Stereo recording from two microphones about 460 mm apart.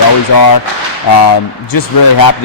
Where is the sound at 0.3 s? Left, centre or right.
Left.